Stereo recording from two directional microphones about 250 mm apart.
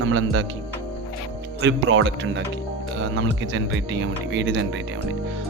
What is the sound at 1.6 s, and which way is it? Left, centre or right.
Speech, right.